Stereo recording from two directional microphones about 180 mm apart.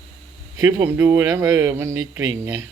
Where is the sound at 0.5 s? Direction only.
15° right (ahead or behind).